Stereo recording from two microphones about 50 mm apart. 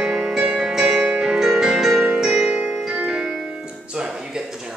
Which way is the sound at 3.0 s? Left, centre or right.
Centre.